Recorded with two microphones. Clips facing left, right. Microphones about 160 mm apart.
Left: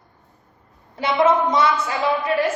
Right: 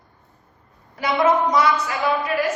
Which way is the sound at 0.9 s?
25° left (ahead or behind).